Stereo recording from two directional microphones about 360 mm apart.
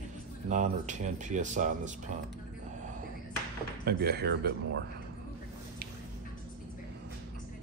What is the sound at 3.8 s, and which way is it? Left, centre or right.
Speech, right.